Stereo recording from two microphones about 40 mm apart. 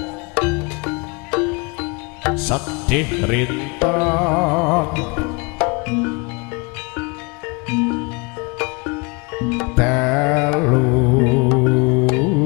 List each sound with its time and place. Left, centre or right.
0.0 s music: centre